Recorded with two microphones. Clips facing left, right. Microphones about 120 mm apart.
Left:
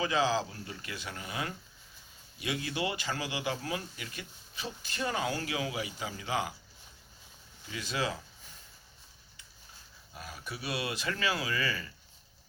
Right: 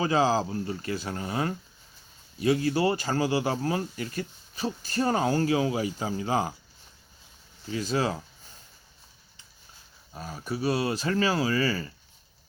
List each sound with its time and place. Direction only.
0.0 s speech: 35° right (ahead or behind)
7.7 s speech: 35° right (ahead or behind)
10.2 s speech: 35° right (ahead or behind)